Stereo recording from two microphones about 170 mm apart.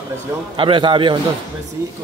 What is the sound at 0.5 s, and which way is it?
Speech, 30° right (ahead or behind).